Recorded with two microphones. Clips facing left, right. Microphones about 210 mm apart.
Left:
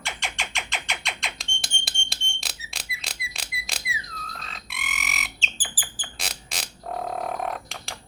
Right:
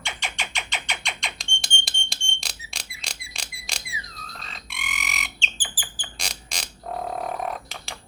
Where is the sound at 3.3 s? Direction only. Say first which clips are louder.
Even; centre (ahead or behind).